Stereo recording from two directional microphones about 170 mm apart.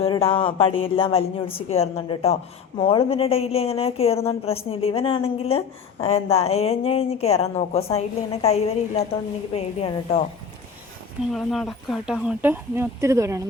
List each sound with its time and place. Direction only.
0.0 s a woman's voice: 35° left (ahead or behind)
11.3 s speech: centre (ahead or behind); by 13.4 s 15° right (ahead or behind)